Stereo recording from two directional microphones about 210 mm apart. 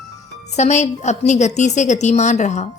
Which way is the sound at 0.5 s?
35° left (ahead or behind).